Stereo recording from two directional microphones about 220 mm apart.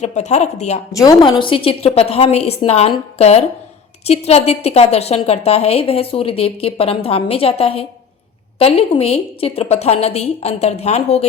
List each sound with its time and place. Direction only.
0.0 s speech: 30° left (ahead or behind)
0.9 s a woman's voice: 15° left (ahead or behind)